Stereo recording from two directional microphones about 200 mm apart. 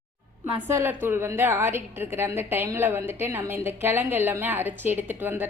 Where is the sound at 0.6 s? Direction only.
10° right (ahead or behind).